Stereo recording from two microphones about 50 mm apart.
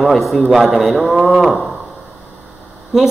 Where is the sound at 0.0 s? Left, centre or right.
Centre.